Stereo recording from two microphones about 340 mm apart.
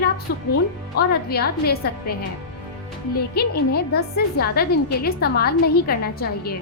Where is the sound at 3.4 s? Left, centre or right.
Left.